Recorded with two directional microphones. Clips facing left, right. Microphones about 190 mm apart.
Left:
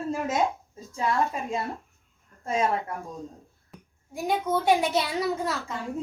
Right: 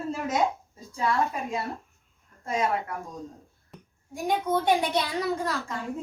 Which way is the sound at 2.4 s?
30° left (ahead or behind).